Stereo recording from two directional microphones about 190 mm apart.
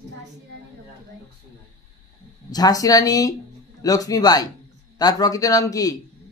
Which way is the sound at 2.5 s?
20° left (ahead or behind).